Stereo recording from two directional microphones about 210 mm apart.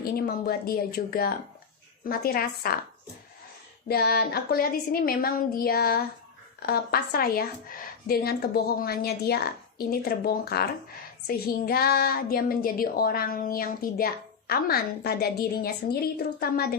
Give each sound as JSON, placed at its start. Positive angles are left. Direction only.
{"t": 0.0, "sound": "speech", "side_deg": 45}
{"t": 3.8, "sound": "speech", "side_deg": 45}